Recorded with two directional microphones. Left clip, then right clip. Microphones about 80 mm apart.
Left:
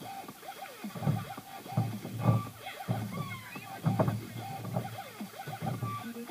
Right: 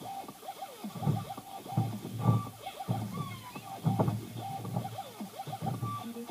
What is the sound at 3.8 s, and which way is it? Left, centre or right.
Music, left.